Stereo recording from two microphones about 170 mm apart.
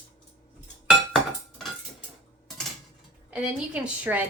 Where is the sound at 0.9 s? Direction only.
Centre (ahead or behind).